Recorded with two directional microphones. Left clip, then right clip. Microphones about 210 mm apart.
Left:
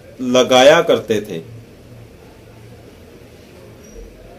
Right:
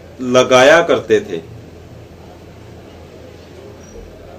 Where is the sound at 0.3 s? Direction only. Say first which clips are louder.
Right 1 dB; 40° left (ahead or behind).